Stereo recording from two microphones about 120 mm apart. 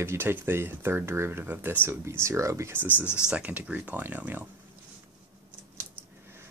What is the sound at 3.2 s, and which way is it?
Speech, 10° right (ahead or behind).